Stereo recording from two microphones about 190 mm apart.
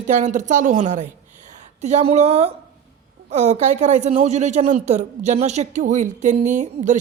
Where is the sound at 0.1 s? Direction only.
40° right (ahead or behind).